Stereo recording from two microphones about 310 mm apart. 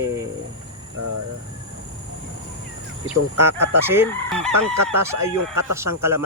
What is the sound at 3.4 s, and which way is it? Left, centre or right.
Speech, centre.